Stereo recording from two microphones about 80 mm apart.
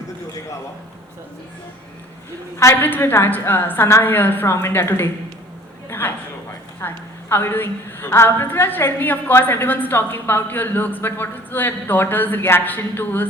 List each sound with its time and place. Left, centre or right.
2.8 s a woman's voice: left
5.9 s a sound: left
6.8 s a woman's voice: left